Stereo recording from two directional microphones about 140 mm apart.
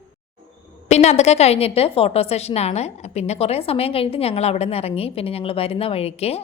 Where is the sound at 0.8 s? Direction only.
55° left (ahead or behind).